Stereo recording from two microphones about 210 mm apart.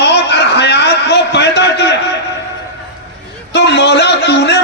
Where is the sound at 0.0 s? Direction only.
55° left (ahead or behind).